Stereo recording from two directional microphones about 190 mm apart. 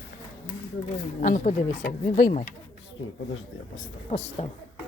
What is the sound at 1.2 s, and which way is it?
Speech, 45° left (ahead or behind).